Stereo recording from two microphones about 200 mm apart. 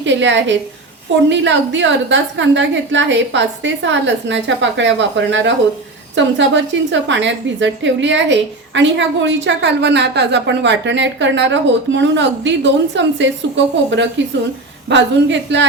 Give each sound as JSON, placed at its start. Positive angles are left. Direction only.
{"t": 0.0, "sound": "a woman's voice", "side_deg": -65}